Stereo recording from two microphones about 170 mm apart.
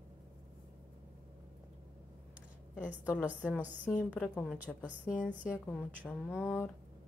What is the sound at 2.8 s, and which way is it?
Speech, 10° right (ahead or behind).